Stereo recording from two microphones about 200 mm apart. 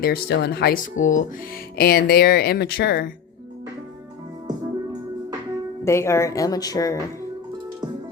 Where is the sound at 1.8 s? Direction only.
50° left (ahead or behind).